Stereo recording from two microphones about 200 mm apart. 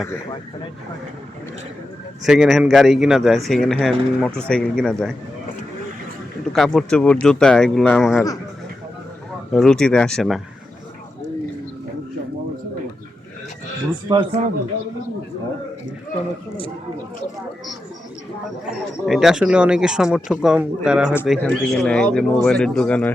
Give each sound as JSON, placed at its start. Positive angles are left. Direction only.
{"t": 2.2, "sound": "speech", "side_deg": 0}
{"t": 6.4, "sound": "speech", "side_deg": 0}
{"t": 9.6, "sound": "speech", "side_deg": 5}
{"t": 14.1, "sound": "speech", "side_deg": -25}
{"t": 18.6, "sound": "speech", "side_deg": 0}